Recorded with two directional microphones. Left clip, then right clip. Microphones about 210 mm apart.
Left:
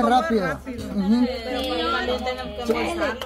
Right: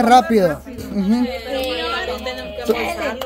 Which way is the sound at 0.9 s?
30° right (ahead or behind).